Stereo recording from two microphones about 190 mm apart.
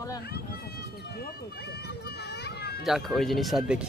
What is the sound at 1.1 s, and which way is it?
Speech, 55° left (ahead or behind).